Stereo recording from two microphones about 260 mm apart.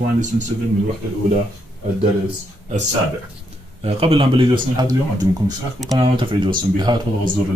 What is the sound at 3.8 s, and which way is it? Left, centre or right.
Speech, right.